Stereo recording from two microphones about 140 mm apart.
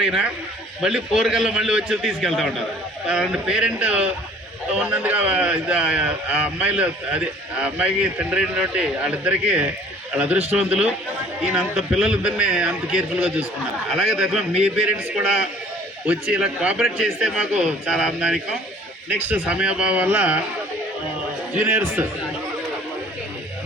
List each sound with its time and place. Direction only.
0.0 s a man's voice: 5° right (ahead or behind)
21.5 s speech: 15° right (ahead or behind)